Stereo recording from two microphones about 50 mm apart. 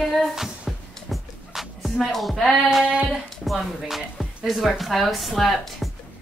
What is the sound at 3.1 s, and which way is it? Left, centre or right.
Speech, centre.